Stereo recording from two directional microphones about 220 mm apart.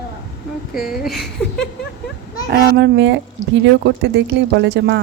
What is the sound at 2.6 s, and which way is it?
Speech, 55° right (ahead or behind).